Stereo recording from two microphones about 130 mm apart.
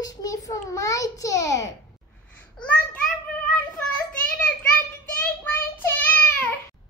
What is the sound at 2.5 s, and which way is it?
Speech, 10° left (ahead or behind).